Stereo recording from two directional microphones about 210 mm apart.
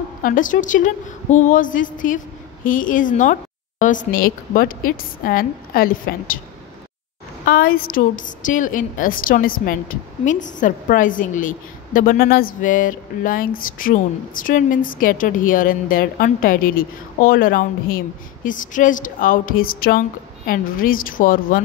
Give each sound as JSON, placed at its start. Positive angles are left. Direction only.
{"t": 0.2, "sound": "a woman's voice", "side_deg": 40}
{"t": 7.4, "sound": "a woman's voice", "side_deg": 45}